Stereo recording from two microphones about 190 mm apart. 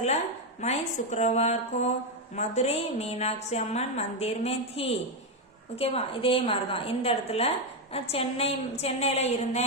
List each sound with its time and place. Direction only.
0.6 s a woman's voice: 35° left (ahead or behind)